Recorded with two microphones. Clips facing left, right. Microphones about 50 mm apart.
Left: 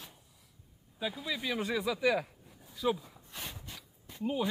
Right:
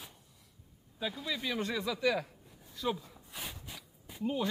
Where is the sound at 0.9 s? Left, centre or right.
Centre.